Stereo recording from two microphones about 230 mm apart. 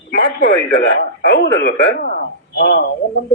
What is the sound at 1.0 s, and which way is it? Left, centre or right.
A man's voice, left.